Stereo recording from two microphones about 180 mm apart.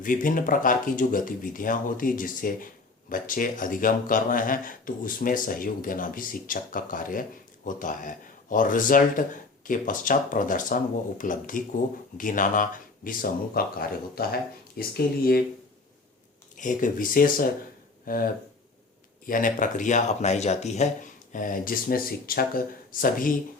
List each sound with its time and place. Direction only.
0.0 s speech: 50° left (ahead or behind)
16.6 s speech: 45° left (ahead or behind)